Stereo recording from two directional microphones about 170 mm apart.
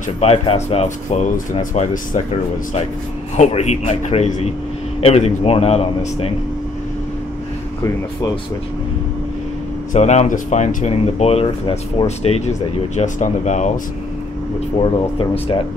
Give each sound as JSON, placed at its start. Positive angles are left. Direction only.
{"t": 0.2, "sound": "speech", "side_deg": 35}
{"t": 3.3, "sound": "speech", "side_deg": 40}
{"t": 9.9, "sound": "speech", "side_deg": 40}
{"t": 14.8, "sound": "speech", "side_deg": 35}